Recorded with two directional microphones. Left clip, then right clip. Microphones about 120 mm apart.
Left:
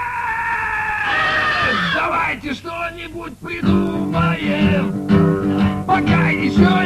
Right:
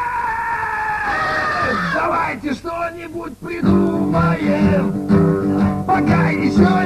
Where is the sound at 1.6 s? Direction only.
40° right (ahead or behind).